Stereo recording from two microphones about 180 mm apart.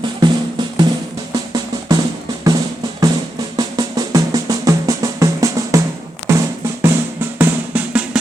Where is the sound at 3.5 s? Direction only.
20° right (ahead or behind).